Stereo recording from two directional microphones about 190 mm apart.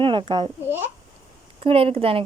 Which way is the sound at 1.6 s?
30° right (ahead or behind).